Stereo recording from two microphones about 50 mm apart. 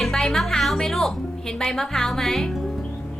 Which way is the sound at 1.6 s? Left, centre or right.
Centre.